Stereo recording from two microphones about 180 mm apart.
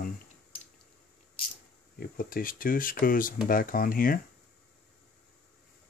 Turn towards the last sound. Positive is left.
turn(degrees=50)  # may be behind; listen again after turning